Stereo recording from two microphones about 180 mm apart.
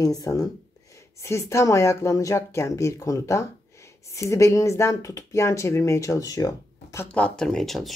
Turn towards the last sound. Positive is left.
turn(degrees=0)  # may be behind; listen again after turning